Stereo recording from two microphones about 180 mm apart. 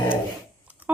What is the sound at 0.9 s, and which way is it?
Speech, 10° right (ahead or behind).